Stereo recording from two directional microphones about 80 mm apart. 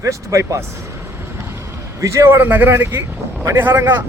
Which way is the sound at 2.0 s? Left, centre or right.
Right.